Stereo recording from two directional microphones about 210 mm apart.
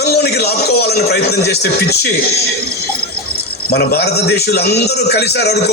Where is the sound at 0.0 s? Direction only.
50° left (ahead or behind).